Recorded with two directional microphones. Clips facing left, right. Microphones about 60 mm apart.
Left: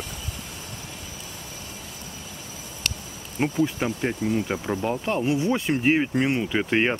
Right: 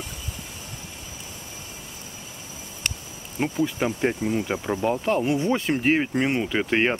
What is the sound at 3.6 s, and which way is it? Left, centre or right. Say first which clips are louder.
Speech: right 3 dB; centre.